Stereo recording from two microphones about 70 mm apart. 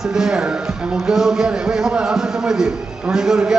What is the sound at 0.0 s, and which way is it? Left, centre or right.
Music, centre.